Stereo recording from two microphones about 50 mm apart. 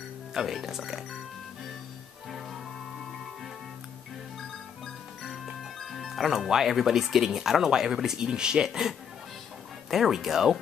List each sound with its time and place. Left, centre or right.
0.3 s speech: centre
4.4 s music: centre
5.8 s speech: centre